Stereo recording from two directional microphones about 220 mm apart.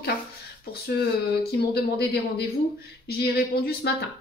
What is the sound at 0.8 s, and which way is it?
Speech, 45° left (ahead or behind).